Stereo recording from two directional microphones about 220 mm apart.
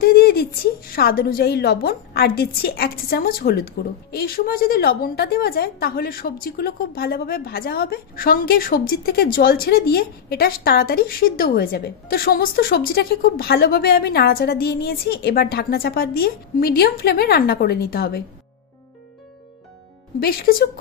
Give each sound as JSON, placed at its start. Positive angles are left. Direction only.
{"t": 0.0, "sound": "a woman's voice", "side_deg": 45}
{"t": 20.2, "sound": "a woman's voice", "side_deg": 45}